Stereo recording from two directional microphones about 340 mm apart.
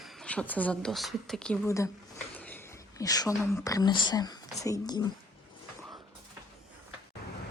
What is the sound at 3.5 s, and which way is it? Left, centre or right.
Speech, centre.